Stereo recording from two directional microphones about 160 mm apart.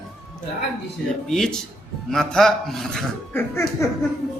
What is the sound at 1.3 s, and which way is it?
A man's voice, 5° left (ahead or behind).